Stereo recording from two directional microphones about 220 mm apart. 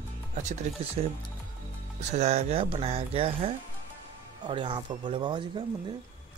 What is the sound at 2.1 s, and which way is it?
Speech, 30° right (ahead or behind).